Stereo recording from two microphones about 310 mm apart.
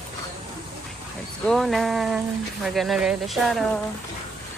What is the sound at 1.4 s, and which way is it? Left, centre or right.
Speech, centre.